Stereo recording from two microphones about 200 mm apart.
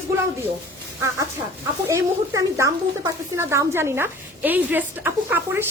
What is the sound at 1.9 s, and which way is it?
A woman's voice, 15° right (ahead or behind).